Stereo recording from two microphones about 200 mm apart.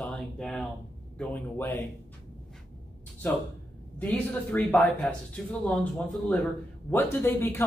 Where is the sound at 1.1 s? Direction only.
5° left (ahead or behind).